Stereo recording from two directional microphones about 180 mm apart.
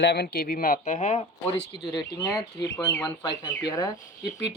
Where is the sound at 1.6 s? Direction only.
70° left (ahead or behind).